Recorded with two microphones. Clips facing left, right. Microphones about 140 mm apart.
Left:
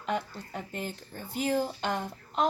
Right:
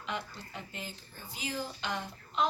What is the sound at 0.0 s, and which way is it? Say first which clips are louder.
A woman's voice: left 7 dB; 45° left (ahead or behind).